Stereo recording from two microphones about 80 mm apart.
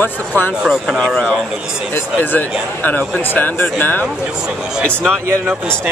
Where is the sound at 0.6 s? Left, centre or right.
Centre.